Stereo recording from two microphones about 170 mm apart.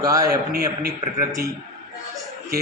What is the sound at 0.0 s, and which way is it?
Speech, 20° right (ahead or behind).